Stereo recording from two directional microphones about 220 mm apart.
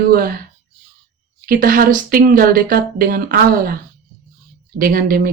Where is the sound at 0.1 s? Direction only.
40° right (ahead or behind).